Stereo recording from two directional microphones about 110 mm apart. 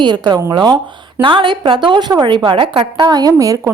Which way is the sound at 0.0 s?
40° right (ahead or behind).